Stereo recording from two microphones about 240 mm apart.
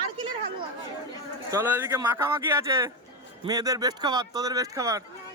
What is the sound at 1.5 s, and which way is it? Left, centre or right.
Speech, centre.